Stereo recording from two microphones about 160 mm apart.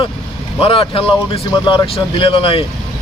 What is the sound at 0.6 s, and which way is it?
Speech, 35° left (ahead or behind).